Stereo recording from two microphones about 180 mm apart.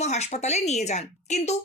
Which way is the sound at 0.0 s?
40° left (ahead or behind).